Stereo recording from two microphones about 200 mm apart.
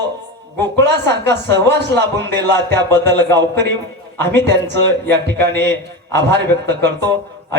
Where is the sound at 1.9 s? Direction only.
55° right (ahead or behind).